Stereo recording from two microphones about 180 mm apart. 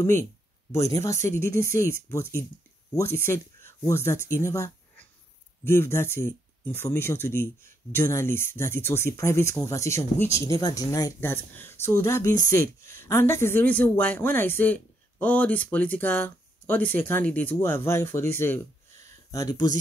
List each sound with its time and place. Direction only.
0.0 s speech: 15° left (ahead or behind)